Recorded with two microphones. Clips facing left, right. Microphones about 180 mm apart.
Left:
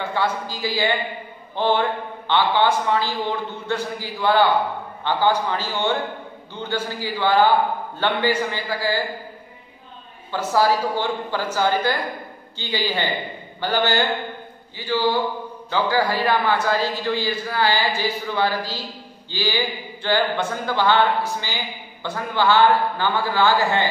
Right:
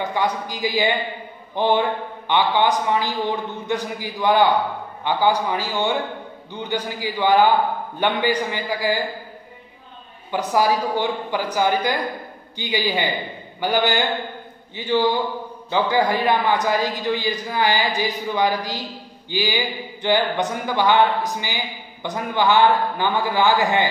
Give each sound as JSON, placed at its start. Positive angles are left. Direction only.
{"t": 0.0, "sound": "a man's voice", "side_deg": -15}
{"t": 10.3, "sound": "a man's voice", "side_deg": -15}
{"t": 22.0, "sound": "a man's voice", "side_deg": -15}